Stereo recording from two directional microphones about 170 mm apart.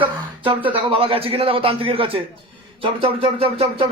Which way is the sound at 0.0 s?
30° right (ahead or behind).